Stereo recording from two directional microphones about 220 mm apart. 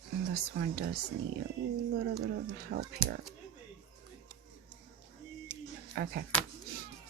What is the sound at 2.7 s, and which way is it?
Speech, 50° right (ahead or behind).